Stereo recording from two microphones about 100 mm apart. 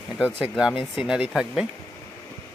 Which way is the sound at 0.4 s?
5° right (ahead or behind).